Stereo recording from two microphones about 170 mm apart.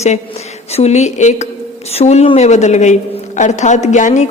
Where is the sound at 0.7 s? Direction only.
40° left (ahead or behind).